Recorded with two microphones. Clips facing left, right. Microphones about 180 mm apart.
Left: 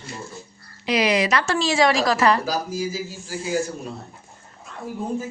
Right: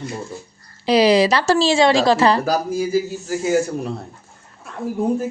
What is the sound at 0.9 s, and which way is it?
A woman's voice, 30° right (ahead or behind).